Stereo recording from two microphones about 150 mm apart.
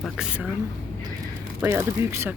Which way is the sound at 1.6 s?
15° right (ahead or behind).